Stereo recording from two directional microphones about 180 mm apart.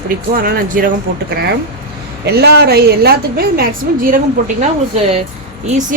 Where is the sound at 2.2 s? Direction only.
65° right (ahead or behind).